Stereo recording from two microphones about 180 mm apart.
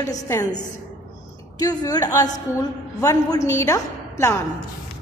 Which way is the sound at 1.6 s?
20° left (ahead or behind).